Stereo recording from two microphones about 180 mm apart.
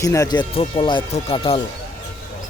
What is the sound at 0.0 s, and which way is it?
Speech, 15° left (ahead or behind).